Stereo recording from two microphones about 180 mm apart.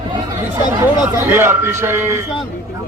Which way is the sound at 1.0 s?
10° right (ahead or behind).